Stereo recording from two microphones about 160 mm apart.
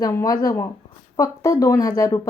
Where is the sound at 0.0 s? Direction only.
20° left (ahead or behind).